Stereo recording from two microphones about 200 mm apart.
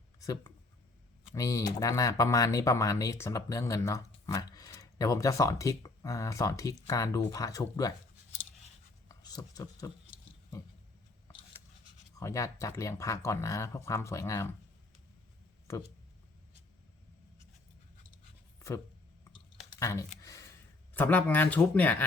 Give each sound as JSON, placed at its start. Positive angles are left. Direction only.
{"t": 0.2, "sound": "speech", "side_deg": 15}
{"t": 9.0, "sound": "speech", "side_deg": 20}
{"t": 12.2, "sound": "speech", "side_deg": 15}
{"t": 19.8, "sound": "speech", "side_deg": 15}
{"t": 20.2, "sound": "a sound", "side_deg": 15}
{"t": 20.9, "sound": "speech", "side_deg": 10}